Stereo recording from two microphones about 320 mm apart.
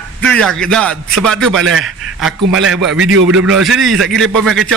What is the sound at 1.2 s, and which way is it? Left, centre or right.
A man's voice, centre.